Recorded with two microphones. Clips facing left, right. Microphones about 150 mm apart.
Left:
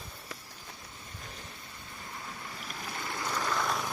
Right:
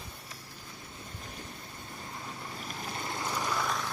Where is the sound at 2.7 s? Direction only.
25° right (ahead or behind).